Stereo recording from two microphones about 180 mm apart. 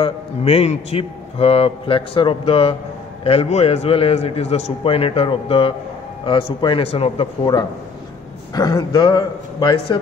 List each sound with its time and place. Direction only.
0.0 s a man's voice: 35° left (ahead or behind)